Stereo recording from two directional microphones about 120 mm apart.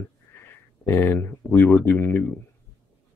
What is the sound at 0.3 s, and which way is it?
Speech, 20° left (ahead or behind).